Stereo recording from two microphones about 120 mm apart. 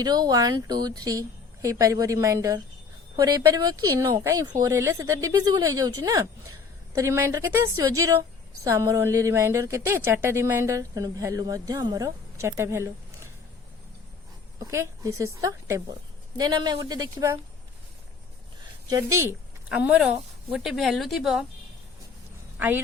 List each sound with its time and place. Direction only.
0.0 s a woman's voice: 35° right (ahead or behind)
14.6 s a woman's voice: 25° right (ahead or behind)
16.4 s speech: 35° right (ahead or behind)
18.9 s a woman's voice: 30° right (ahead or behind)
19.6 s speech: 10° right (ahead or behind)
22.5 s a woman's voice: 15° right (ahead or behind)